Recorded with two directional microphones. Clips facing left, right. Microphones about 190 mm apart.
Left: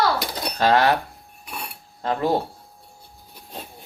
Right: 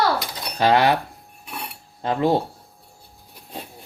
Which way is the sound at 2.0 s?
20° right (ahead or behind).